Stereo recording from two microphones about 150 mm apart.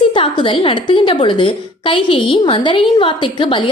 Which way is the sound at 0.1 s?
35° left (ahead or behind).